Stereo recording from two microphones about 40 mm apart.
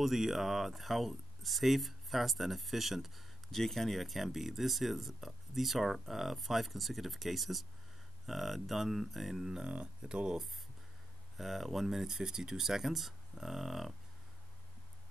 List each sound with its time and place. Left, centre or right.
0.0 s speech: centre
3.5 s speech: centre
9.7 s speech: right
11.3 s speech: centre